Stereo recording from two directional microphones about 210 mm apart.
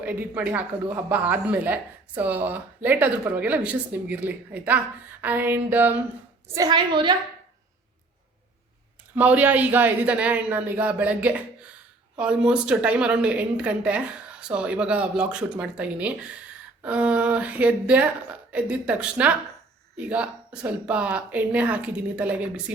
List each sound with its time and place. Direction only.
0.0 s a woman's voice: 5° right (ahead or behind); by 7.2 s 20° right (ahead or behind)
9.1 s a woman's voice: 5° right (ahead or behind)